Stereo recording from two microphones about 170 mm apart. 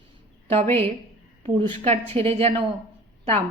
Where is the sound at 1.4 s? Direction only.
35° right (ahead or behind).